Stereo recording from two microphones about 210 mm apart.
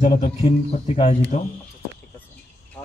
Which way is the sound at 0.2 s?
25° left (ahead or behind).